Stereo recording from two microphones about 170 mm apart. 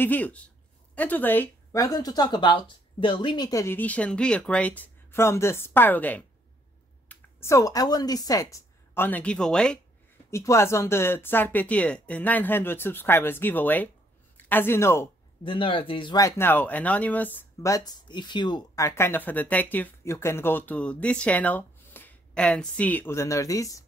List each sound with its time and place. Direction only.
0.0 s speech: 10° left (ahead or behind)
10.3 s speech: 15° left (ahead or behind)
15.4 s speech: 30° left (ahead or behind)